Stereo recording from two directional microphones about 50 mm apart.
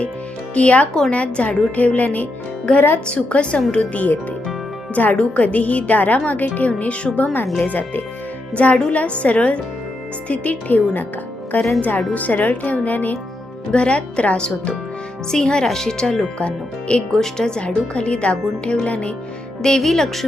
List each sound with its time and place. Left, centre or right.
0.5 s a woman's voice: left
3.1 s a woman's voice: left
8.5 s a woman's voice: left
13.7 s speech: left
19.6 s speech: centre